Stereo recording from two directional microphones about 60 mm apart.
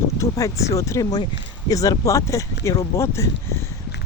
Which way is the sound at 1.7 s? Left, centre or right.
Left.